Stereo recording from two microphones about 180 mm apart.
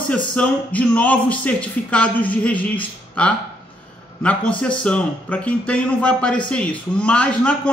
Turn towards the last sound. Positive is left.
turn(degrees=5)  # may be behind; listen again after turning